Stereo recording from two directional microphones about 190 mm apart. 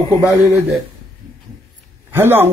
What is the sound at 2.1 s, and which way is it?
Speech, 10° right (ahead or behind).